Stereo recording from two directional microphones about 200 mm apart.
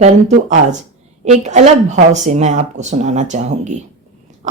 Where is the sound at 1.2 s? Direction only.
35° right (ahead or behind).